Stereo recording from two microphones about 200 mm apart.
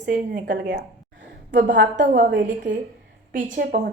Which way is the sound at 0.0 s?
55° right (ahead or behind).